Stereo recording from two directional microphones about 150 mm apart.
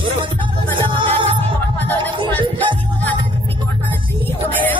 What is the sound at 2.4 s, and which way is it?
Music, 30° right (ahead or behind).